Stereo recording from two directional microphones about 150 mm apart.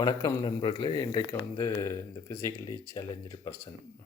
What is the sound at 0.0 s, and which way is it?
Speech, 25° left (ahead or behind).